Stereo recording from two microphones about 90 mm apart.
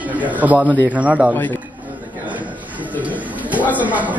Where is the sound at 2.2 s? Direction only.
15° right (ahead or behind).